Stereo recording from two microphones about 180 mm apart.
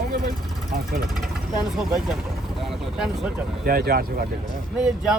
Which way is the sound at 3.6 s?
55° right (ahead or behind).